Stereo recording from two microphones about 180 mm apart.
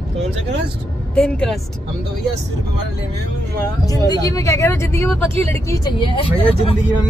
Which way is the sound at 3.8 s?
20° left (ahead or behind).